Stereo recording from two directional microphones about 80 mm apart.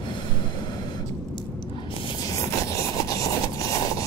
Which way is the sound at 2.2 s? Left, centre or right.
Left.